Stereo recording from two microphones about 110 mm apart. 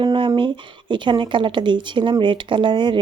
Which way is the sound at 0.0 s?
45° right (ahead or behind).